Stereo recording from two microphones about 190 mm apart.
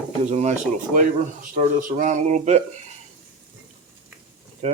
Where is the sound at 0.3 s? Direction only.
35° right (ahead or behind).